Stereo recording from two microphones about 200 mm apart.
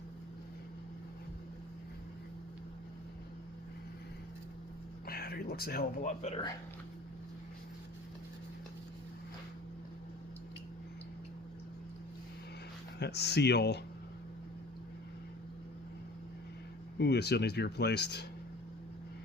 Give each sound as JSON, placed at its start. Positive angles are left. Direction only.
{"t": 5.0, "sound": "speech", "side_deg": 50}
{"t": 13.0, "sound": "speech", "side_deg": 55}
{"t": 17.0, "sound": "speech", "side_deg": 55}